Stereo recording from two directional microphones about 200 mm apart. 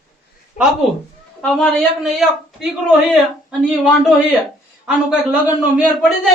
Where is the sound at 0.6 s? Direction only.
40° left (ahead or behind).